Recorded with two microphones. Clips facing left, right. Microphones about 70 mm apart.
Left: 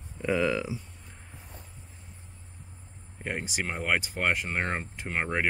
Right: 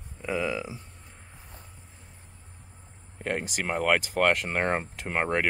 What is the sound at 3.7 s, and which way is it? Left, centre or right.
Speech, right.